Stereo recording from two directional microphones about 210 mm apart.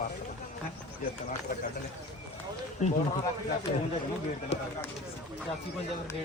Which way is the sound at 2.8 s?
35° left (ahead or behind).